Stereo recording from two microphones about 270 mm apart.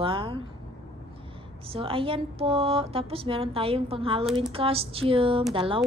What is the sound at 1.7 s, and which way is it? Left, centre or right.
Speech, centre.